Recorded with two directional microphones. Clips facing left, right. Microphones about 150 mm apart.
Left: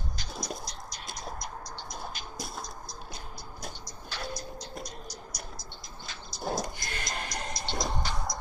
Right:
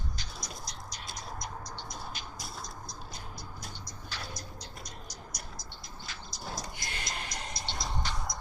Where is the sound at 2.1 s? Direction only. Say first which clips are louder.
Left 3 dB; 40° left (ahead or behind).